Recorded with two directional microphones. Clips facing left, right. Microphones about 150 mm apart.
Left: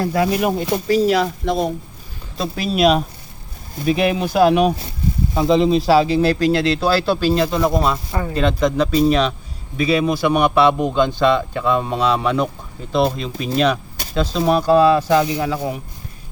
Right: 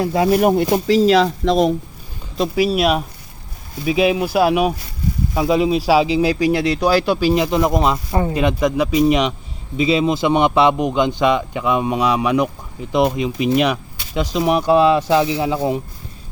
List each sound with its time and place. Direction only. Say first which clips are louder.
0.0 s speech: right 1 dB; 20° right (ahead or behind)
0.9 s speech: right 1 dB; 90° right
2.4 s speech: right 1 dB; 10° right (ahead or behind)